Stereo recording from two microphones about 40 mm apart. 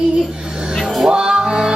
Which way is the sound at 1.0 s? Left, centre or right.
Centre.